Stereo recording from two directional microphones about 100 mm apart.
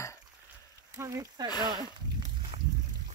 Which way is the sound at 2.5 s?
75° right (ahead or behind).